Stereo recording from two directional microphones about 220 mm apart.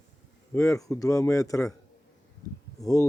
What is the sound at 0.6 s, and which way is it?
A man's voice, 15° left (ahead or behind).